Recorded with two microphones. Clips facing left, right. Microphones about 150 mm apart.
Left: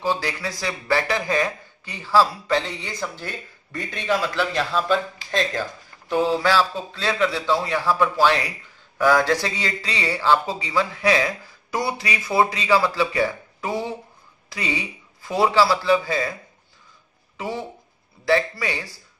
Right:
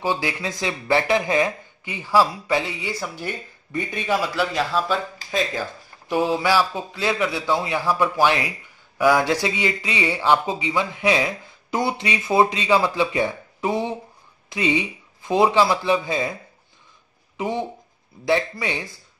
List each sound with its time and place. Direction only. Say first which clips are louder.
0.0 s a man's voice: even; 15° right (ahead or behind)
17.4 s speech: right 4 dB; 20° right (ahead or behind)